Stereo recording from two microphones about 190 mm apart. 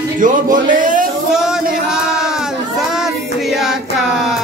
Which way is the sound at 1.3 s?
5° right (ahead or behind).